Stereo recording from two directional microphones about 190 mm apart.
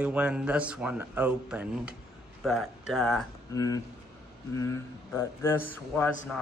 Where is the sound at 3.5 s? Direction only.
20° left (ahead or behind).